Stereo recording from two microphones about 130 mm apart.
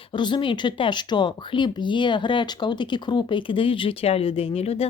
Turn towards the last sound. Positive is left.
turn(degrees=50)  # may be behind; listen again after turning